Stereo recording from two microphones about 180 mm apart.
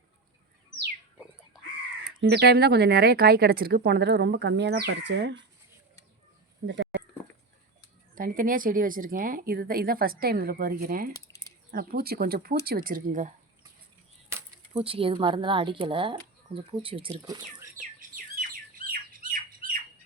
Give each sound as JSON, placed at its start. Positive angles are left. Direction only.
{"t": 2.2, "sound": "speech", "side_deg": -65}
{"t": 6.7, "sound": "speech", "side_deg": -85}
{"t": 8.1, "sound": "a woman's voice", "side_deg": -50}
{"t": 14.7, "sound": "speech", "side_deg": -30}
{"t": 18.3, "sound": "squawk", "side_deg": -50}